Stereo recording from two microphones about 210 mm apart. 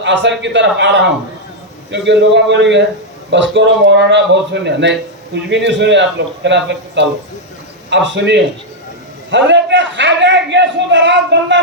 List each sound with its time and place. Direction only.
0.0 s speech: 60° right (ahead or behind)